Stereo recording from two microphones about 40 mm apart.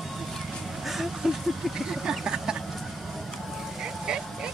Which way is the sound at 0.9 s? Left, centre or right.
Centre.